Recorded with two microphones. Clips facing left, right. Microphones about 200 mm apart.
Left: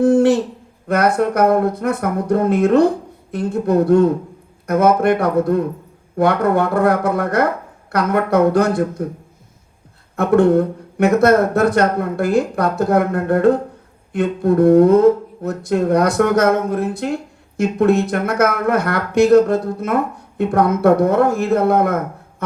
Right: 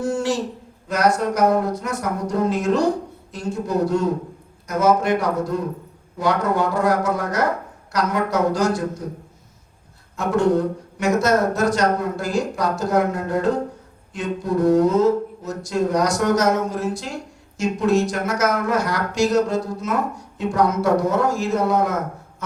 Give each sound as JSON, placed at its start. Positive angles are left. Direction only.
{"t": 0.0, "sound": "speech", "side_deg": 60}
{"t": 10.2, "sound": "speech", "side_deg": 60}